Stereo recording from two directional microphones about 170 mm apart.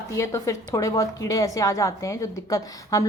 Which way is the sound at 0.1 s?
20° left (ahead or behind).